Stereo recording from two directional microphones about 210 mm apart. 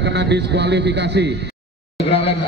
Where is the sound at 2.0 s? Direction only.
30° left (ahead or behind).